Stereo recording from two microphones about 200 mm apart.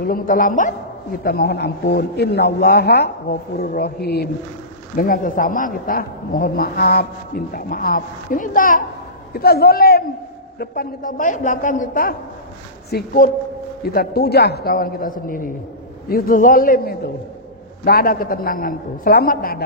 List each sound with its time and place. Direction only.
0.0 s speech: 45° left (ahead or behind)
1.2 s speech: 50° left (ahead or behind)